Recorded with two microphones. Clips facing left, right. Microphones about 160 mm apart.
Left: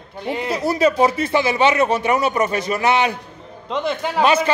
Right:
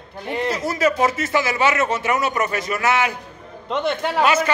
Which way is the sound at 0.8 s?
30° left (ahead or behind).